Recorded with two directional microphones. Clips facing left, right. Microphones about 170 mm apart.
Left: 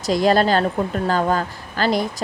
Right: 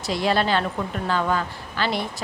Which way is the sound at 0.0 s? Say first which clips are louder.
Left 6 dB; 40° left (ahead or behind).